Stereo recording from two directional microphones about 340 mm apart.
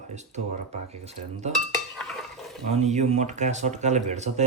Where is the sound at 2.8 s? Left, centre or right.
Centre.